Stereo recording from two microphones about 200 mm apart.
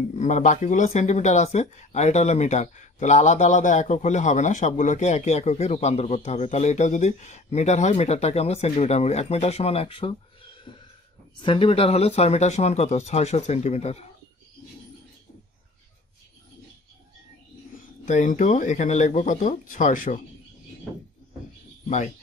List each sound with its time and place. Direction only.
0.1 s speech: 35° left (ahead or behind)
11.3 s speech: 25° left (ahead or behind)
17.7 s speech: 40° left (ahead or behind)
21.8 s speech: 35° left (ahead or behind)